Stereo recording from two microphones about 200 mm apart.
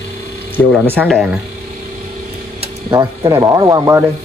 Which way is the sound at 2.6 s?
20° right (ahead or behind).